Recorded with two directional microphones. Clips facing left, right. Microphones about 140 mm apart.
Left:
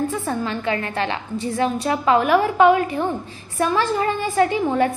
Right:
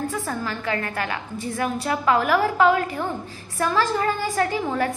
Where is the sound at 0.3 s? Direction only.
20° left (ahead or behind).